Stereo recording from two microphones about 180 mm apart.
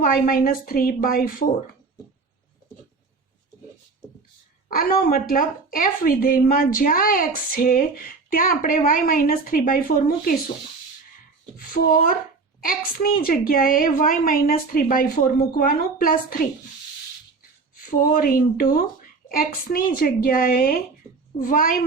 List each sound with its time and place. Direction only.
0.0 s a woman's voice: 50° left (ahead or behind)
4.7 s a woman's voice: 55° left (ahead or behind)
11.5 s a child's voice: 55° left (ahead or behind)
13.2 s a woman's voice: 55° left (ahead or behind)
17.7 s a woman's voice: 55° left (ahead or behind)